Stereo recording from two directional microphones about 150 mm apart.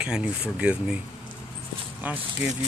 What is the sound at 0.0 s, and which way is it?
Speech, 5° right (ahead or behind).